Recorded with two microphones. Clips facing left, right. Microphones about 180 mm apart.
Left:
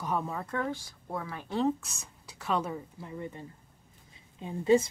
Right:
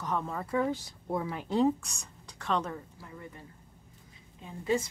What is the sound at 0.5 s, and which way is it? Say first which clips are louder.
Speech: right 4 dB; 15° right (ahead or behind).